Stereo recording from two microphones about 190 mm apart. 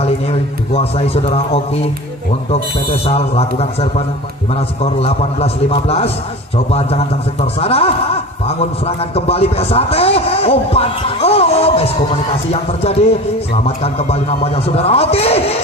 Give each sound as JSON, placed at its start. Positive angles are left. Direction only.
{"t": 0.0, "sound": "a man's voice", "side_deg": 30}
{"t": 3.1, "sound": "a man's voice", "side_deg": 30}